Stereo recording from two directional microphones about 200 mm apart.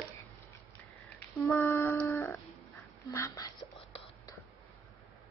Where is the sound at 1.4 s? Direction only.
10° left (ahead or behind).